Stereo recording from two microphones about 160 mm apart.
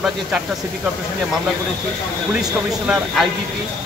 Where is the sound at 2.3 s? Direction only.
5° right (ahead or behind).